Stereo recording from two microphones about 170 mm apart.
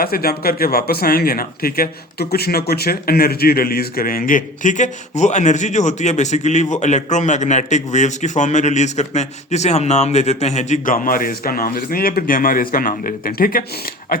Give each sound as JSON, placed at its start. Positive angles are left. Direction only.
{"t": 0.0, "sound": "speech", "side_deg": 60}